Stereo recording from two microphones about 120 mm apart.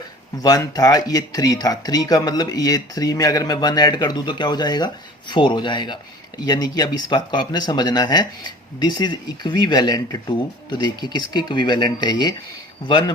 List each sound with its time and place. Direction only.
0.3 s speech: 30° left (ahead or behind)